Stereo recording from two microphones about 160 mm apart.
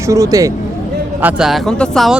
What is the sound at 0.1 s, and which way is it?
Speech, 20° right (ahead or behind).